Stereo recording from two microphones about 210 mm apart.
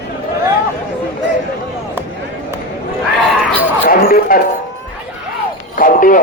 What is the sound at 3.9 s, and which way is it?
Speech, 45° left (ahead or behind).